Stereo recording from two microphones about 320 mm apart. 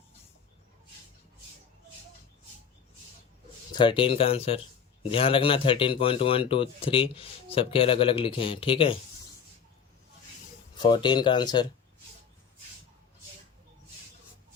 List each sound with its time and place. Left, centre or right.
3.7 s speech: centre
10.8 s speech: centre